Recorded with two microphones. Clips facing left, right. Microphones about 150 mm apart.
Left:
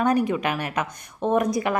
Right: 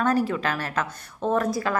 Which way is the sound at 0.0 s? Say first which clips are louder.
Left 2 dB; 15° left (ahead or behind).